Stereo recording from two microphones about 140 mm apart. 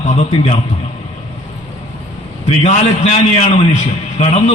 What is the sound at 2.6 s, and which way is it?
A man's voice, 50° left (ahead or behind).